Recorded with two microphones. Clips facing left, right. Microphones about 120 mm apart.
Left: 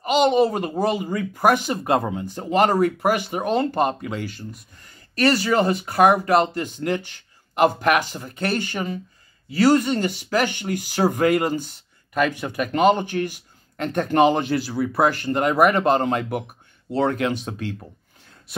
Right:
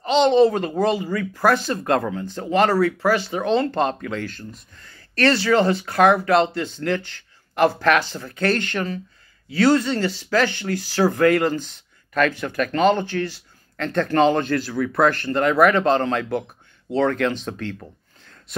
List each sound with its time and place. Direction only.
0.0 s speech: 10° left (ahead or behind)